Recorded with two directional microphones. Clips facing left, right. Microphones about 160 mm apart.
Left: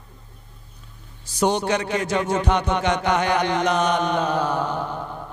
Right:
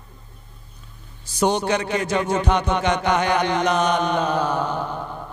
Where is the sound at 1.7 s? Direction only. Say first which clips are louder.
Right 1 dB; 15° right (ahead or behind).